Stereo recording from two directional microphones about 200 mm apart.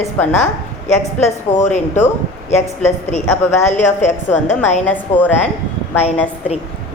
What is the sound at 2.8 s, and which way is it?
Speech, 35° left (ahead or behind).